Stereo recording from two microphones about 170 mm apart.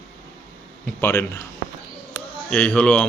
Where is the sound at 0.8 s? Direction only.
15° left (ahead or behind).